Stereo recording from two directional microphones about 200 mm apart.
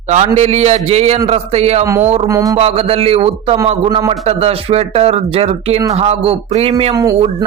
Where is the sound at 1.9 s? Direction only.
15° right (ahead or behind).